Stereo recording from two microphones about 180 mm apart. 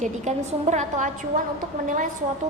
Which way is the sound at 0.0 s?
40° right (ahead or behind).